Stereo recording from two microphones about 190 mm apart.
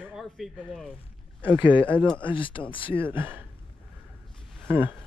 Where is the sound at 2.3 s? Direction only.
25° left (ahead or behind).